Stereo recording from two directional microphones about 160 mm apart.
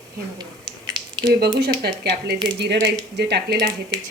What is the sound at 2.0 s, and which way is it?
Speech, 90° right.